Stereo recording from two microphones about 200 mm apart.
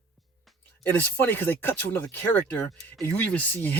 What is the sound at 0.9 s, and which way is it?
Speech, 10° left (ahead or behind).